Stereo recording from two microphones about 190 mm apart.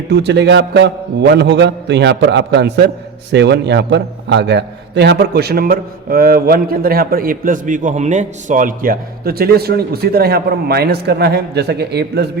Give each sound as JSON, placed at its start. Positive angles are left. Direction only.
{"t": 0.1, "sound": "a man's voice", "side_deg": -65}